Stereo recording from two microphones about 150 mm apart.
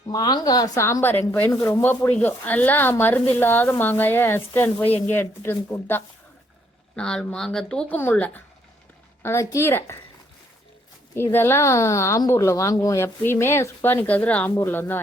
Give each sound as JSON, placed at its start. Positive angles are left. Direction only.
{"t": 0.1, "sound": "speech", "side_deg": 25}
{"t": 6.9, "sound": "speech", "side_deg": 5}
{"t": 11.1, "sound": "speech", "side_deg": 15}